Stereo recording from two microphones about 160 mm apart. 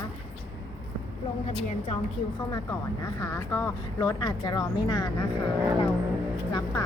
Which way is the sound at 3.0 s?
20° left (ahead or behind).